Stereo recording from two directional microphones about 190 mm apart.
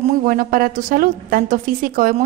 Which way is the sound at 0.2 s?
45° right (ahead or behind).